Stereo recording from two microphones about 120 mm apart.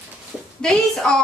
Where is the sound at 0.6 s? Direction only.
5° left (ahead or behind).